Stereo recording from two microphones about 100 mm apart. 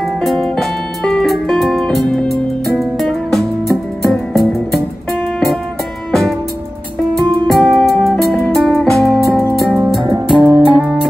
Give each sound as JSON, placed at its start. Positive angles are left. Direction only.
{"t": 0.0, "sound": "music", "side_deg": 0}
{"t": 7.2, "sound": "music", "side_deg": 0}